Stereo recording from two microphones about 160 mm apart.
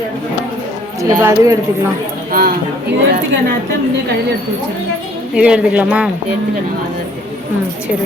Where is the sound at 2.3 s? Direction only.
65° right (ahead or behind).